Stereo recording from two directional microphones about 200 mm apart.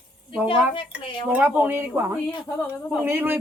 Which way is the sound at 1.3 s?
5° right (ahead or behind).